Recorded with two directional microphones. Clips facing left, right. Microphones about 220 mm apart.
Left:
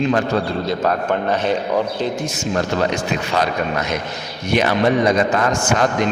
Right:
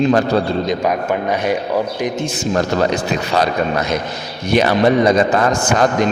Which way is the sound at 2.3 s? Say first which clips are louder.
Right 4 dB; 40° right (ahead or behind).